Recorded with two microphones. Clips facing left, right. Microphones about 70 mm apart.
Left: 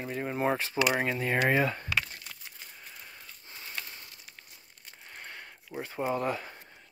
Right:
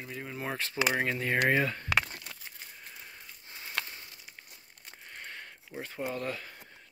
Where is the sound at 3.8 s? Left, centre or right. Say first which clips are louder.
Right 5 dB; right.